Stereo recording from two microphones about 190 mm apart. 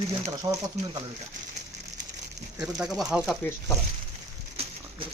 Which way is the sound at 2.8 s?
5° right (ahead or behind).